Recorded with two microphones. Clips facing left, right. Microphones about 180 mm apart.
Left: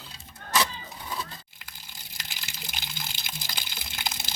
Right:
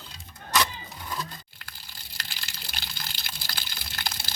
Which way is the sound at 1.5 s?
15° left (ahead or behind).